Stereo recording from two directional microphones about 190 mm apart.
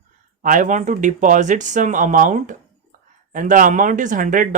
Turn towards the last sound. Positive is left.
turn(degrees=-45)  # may be behind; listen again after turning